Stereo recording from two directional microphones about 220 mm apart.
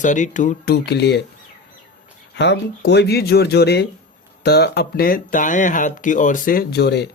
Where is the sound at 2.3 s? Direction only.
50° left (ahead or behind).